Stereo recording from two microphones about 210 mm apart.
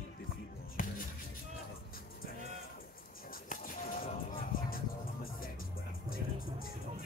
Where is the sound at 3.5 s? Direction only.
40° left (ahead or behind).